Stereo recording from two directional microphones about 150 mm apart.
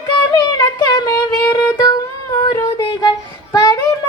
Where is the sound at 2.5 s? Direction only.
25° left (ahead or behind).